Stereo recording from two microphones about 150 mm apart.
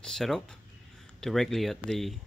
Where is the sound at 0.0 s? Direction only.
5° left (ahead or behind).